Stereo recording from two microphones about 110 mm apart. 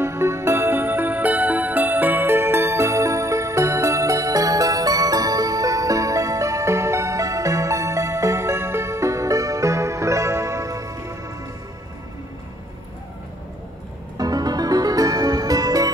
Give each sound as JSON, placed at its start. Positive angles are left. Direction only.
{"t": 0.0, "sound": "music", "side_deg": -25}
{"t": 14.1, "sound": "music", "side_deg": -35}